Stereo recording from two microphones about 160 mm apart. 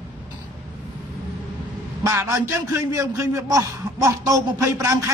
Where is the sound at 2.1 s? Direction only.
20° right (ahead or behind).